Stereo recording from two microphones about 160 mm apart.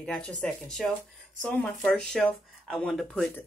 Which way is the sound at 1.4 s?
5° left (ahead or behind).